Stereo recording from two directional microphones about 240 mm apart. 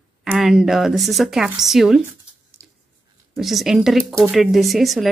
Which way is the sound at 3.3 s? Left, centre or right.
Centre.